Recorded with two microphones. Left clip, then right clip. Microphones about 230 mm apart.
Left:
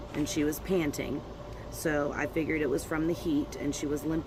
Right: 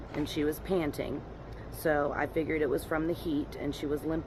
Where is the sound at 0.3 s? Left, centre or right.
Left.